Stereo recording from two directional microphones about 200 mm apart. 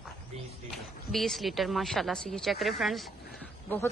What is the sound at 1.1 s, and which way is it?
A woman's voice, centre (ahead or behind).